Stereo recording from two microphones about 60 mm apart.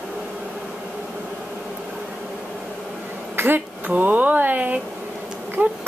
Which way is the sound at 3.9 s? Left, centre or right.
Right.